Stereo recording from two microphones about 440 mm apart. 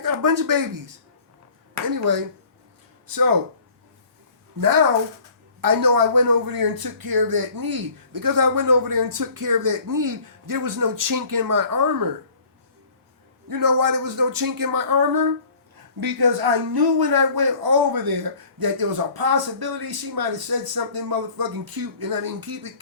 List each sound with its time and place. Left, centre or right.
0.0 s speech: right
4.6 s speech: right
13.5 s speech: right